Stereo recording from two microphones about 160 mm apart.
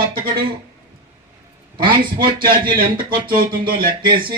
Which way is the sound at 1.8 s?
65° right (ahead or behind).